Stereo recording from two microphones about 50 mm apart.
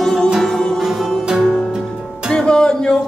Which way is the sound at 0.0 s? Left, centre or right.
Centre.